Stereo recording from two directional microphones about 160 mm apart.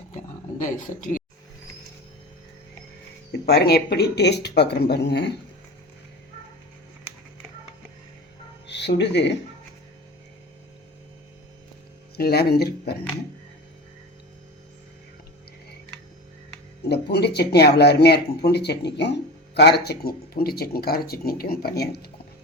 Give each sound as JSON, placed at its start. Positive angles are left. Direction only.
{"t": 0.6, "sound": "speech", "side_deg": 55}
{"t": 3.4, "sound": "speech", "side_deg": 90}
{"t": 8.6, "sound": "speech", "side_deg": 90}
{"t": 12.1, "sound": "speech", "side_deg": 80}
{"t": 16.9, "sound": "speech", "side_deg": 90}